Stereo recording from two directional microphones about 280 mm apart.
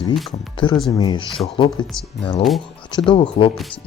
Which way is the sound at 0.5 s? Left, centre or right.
Centre.